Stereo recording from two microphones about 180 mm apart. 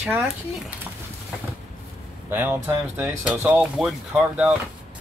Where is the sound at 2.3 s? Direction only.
10° right (ahead or behind).